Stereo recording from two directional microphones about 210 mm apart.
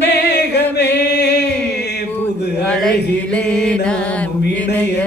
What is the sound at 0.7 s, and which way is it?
Chant, 55° left (ahead or behind).